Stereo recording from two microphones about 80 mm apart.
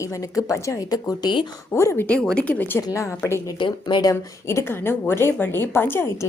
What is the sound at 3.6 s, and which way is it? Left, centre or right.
Speech, left.